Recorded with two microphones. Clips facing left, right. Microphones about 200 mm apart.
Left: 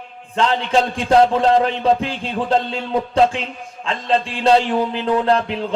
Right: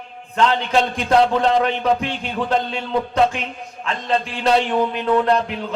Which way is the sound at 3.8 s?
30° left (ahead or behind).